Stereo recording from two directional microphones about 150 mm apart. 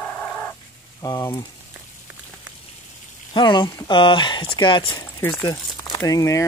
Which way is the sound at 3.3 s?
30° left (ahead or behind).